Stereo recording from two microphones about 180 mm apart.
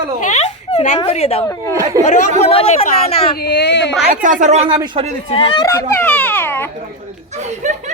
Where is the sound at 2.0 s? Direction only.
40° left (ahead or behind).